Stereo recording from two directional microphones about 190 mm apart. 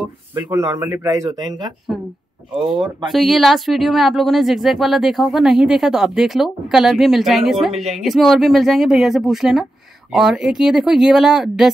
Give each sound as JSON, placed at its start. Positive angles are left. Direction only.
{"t": 0.3, "sound": "speech", "side_deg": -15}
{"t": 2.5, "sound": "speech", "side_deg": 0}